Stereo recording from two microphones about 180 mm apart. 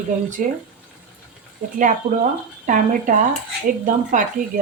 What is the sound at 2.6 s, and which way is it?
Speech, 45° right (ahead or behind).